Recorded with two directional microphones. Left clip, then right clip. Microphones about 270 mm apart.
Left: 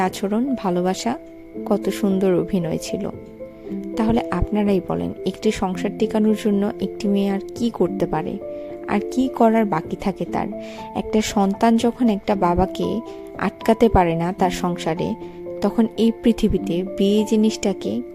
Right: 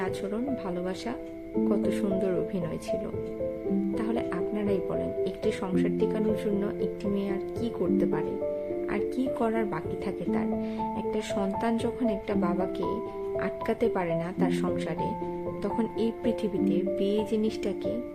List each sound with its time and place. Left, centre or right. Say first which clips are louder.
0.0 s speech: left 9 dB; left